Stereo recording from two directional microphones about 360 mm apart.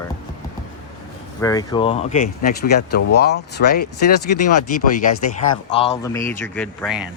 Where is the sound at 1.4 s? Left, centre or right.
Centre; by 3.8 s left.